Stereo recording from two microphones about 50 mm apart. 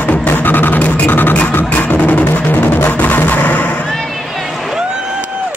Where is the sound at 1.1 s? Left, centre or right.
Left.